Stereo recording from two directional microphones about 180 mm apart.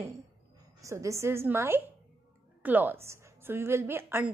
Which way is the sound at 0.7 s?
15° right (ahead or behind).